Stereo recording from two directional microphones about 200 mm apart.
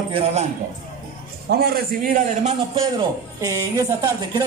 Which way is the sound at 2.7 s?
20° right (ahead or behind).